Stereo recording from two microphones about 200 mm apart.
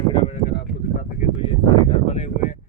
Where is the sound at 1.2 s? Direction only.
25° left (ahead or behind).